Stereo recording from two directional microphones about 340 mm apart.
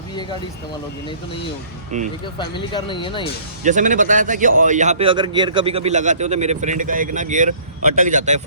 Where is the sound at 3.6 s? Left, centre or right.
Right.